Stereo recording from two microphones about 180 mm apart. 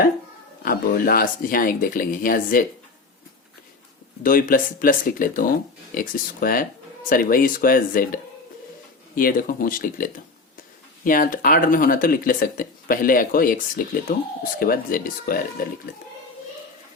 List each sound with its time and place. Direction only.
0.6 s speech: 55° left (ahead or behind)
4.2 s speech: 50° left (ahead or behind)
14.6 s speech: 50° left (ahead or behind)